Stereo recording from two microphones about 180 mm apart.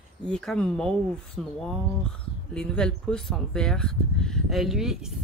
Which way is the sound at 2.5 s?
5° left (ahead or behind).